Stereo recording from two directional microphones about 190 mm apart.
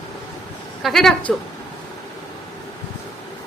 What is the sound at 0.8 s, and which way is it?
Speech, centre (ahead or behind).